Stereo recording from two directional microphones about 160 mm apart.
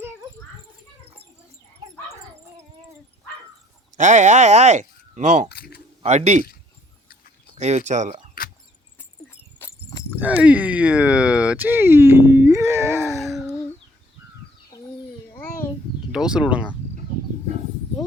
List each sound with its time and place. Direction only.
3.9 s speech: 50° right (ahead or behind)
5.5 s speech: 80° left
6.0 s speech: 45° right (ahead or behind)
7.5 s speech: 50° right (ahead or behind)
9.6 s a sound: 15° left (ahead or behind)
10.1 s speech: 10° right (ahead or behind)
13.1 s wail: centre (ahead or behind)
16.1 s speech: 5° right (ahead or behind)